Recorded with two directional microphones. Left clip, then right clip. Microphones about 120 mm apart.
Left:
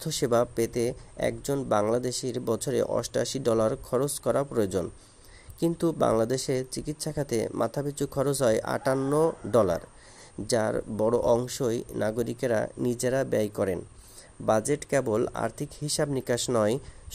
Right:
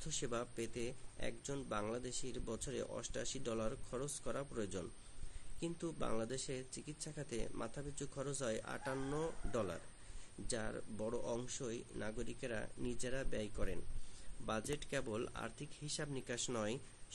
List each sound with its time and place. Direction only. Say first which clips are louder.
0.0 s speech: left 18 dB; 45° left (ahead or behind)
9.0 s speech: left 18 dB; 40° left (ahead or behind)